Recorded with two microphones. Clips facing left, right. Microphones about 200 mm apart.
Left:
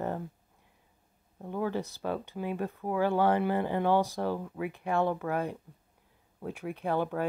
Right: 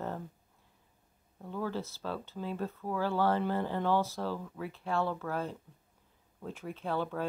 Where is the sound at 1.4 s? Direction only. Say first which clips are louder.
Left 4 dB; 15° left (ahead or behind).